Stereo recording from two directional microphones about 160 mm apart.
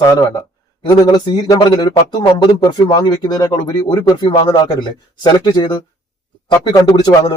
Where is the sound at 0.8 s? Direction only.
25° left (ahead or behind).